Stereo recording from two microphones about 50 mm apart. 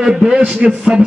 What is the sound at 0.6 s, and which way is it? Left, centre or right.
Speech, right.